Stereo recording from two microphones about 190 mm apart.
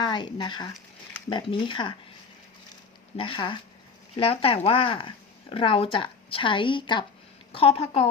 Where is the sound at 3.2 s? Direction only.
25° left (ahead or behind).